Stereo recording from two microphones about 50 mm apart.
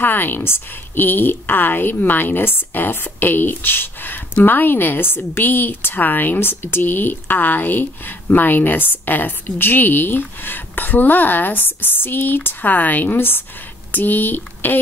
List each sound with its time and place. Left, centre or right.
0.0 s a woman's voice: left